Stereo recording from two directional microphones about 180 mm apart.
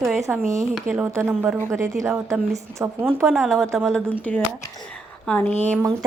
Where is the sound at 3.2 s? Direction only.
Centre (ahead or behind).